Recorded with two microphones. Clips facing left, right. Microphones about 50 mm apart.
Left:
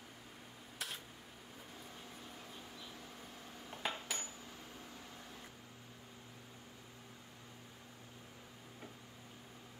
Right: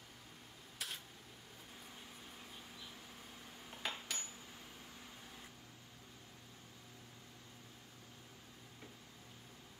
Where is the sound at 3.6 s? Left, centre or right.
Centre.